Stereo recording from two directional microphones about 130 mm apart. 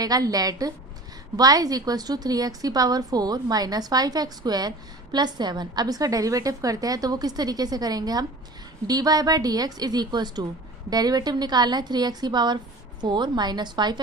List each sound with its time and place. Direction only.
0.0 s a woman's voice: 30° right (ahead or behind)